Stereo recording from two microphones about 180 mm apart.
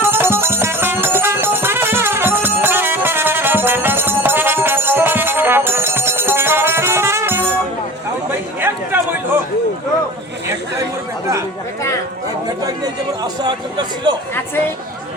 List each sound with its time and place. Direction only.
0.0 s music: 15° right (ahead or behind)
8.3 s chatter: 10° right (ahead or behind)
12.6 s a man's voice: 20° right (ahead or behind)